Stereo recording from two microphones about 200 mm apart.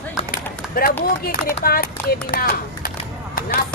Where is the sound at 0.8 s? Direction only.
50° left (ahead or behind).